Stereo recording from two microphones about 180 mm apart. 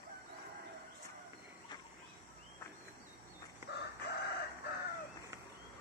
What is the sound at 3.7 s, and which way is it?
Chicken, 70° left (ahead or behind).